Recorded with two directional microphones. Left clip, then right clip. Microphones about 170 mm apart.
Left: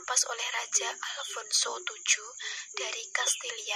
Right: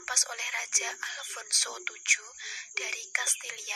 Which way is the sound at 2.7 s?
40° right (ahead or behind).